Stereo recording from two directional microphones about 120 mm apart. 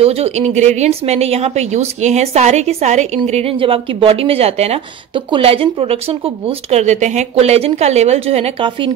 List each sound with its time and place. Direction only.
0.0 s a woman's voice: 60° right (ahead or behind)
3.5 s speech: 50° right (ahead or behind)
5.1 s speech: 50° right (ahead or behind)
6.8 s a woman's voice: 75° right (ahead or behind)